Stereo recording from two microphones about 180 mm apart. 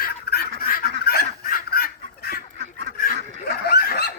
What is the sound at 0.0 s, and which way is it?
Duck, 60° left (ahead or behind).